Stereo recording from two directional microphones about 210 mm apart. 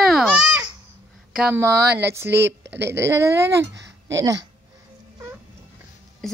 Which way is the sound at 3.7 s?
60° right (ahead or behind).